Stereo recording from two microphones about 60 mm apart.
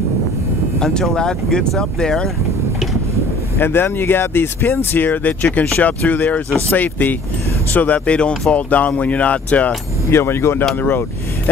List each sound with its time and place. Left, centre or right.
0.7 s speech: centre
3.5 s speech: left
10.1 s speech: left